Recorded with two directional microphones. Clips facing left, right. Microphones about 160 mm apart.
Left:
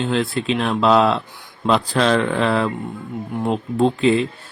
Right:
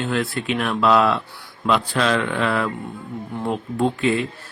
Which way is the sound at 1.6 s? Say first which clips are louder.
Left 3 dB; 35° left (ahead or behind).